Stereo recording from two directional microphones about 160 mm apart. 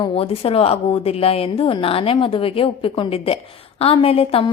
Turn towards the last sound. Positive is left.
turn(degrees=35)  # may be behind; listen again after turning